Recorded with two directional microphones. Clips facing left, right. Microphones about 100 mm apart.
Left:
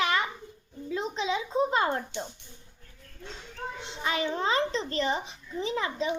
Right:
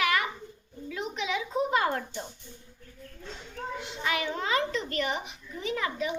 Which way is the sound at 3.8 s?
30° left (ahead or behind).